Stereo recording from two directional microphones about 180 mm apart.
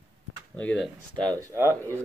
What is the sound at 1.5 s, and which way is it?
Speech, 15° right (ahead or behind).